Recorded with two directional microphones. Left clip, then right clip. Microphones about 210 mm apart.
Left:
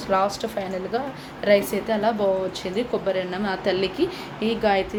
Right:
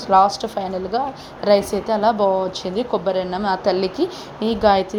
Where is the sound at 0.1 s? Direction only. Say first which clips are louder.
Right 7 dB; 15° right (ahead or behind).